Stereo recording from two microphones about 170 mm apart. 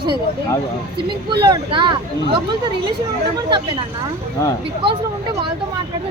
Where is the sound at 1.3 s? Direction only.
25° right (ahead or behind).